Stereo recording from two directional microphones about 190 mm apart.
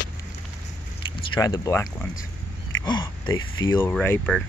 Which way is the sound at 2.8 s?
25° left (ahead or behind).